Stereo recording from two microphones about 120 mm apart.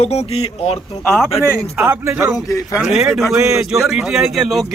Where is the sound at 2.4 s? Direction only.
25° left (ahead or behind).